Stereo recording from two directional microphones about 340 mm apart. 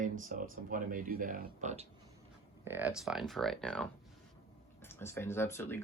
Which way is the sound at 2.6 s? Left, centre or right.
Centre.